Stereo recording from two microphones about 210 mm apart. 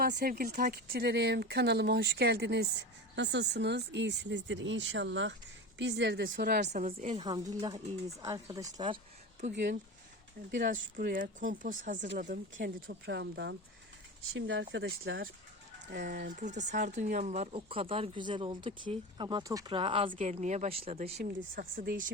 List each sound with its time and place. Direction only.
0.0 s speech: 45° right (ahead or behind)
6.8 s speech: 30° right (ahead or behind)
8.2 s speech: 15° right (ahead or behind)
9.4 s speech: 40° right (ahead or behind)
12.5 s speech: 55° right (ahead or behind); by 21.2 s 30° right (ahead or behind)
21.5 s speech: 40° right (ahead or behind)